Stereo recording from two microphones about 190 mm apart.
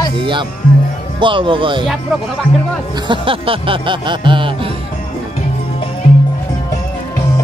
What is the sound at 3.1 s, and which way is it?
Music, 30° right (ahead or behind).